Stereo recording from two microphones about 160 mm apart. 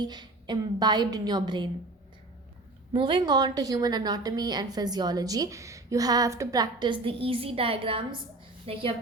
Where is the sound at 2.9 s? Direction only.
30° right (ahead or behind).